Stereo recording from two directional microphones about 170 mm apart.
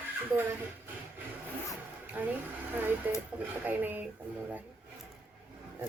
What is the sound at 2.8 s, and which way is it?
A woman's voice, 10° right (ahead or behind).